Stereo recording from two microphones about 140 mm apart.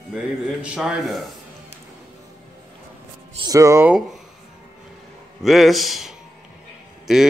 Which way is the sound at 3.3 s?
25° right (ahead or behind).